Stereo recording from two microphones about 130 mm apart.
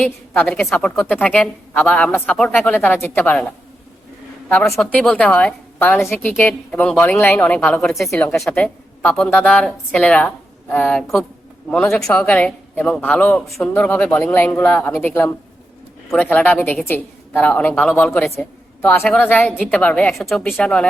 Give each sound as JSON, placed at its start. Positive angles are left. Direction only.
{"t": 0.4, "sound": "a man's voice", "side_deg": 0}
{"t": 4.4, "sound": "a woman's voice", "side_deg": 10}